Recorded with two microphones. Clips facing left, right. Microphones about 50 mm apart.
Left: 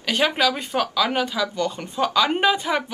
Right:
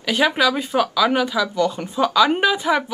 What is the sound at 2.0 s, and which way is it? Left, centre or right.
Speech, centre.